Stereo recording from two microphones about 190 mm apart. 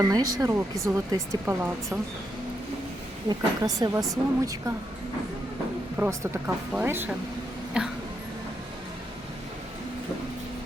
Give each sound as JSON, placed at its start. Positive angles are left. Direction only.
{"t": 0.0, "sound": "speech", "side_deg": -20}
{"t": 3.2, "sound": "a woman's voice", "side_deg": -20}
{"t": 6.0, "sound": "speech", "side_deg": -10}